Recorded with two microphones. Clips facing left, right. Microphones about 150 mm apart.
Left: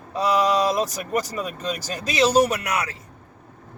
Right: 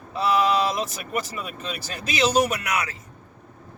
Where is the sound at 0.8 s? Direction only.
40° left (ahead or behind).